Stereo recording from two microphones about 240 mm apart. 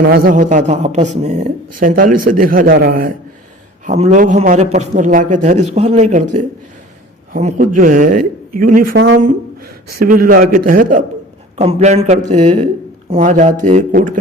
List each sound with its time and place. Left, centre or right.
0.1 s a man's voice: right
7.3 s a man's voice: right